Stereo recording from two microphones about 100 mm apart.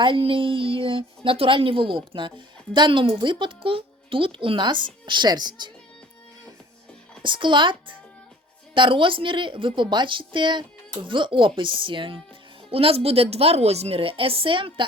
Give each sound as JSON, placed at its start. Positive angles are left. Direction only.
{"t": 0.0, "sound": "a woman's voice", "side_deg": -60}
{"t": 7.2, "sound": "a woman's voice", "side_deg": -55}
{"t": 12.7, "sound": "a woman's voice", "side_deg": -70}